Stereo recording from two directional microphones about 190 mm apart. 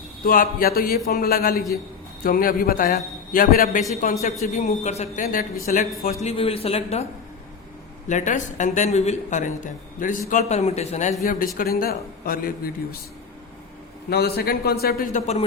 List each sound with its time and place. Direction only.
0.3 s a man's voice: 50° left (ahead or behind)
4.0 s a man's voice: 35° left (ahead or behind)
6.2 s speech: 30° left (ahead or behind)
11.2 s a man's voice: 50° left (ahead or behind)
14.1 s a man's voice: 55° left (ahead or behind); by 15.4 s 40° left (ahead or behind)